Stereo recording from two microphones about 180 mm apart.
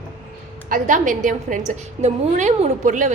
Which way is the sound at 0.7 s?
45° right (ahead or behind).